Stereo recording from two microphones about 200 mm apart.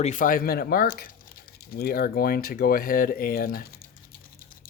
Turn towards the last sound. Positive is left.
turn(degrees=45)  # may be behind; listen again after turning